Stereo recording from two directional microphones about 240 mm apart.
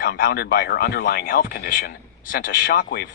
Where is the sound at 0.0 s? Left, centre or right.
Left.